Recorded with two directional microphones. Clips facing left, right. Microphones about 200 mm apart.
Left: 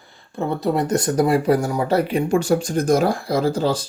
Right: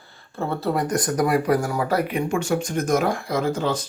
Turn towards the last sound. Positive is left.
turn(degrees=35)  # may be behind; listen again after turning